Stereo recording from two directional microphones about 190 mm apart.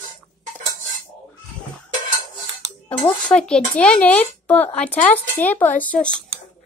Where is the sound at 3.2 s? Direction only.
5° left (ahead or behind).